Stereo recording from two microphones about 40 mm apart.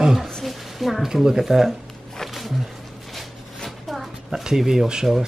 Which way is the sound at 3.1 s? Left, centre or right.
Centre.